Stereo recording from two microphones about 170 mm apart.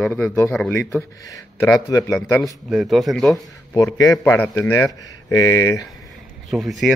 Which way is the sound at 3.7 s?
20° left (ahead or behind).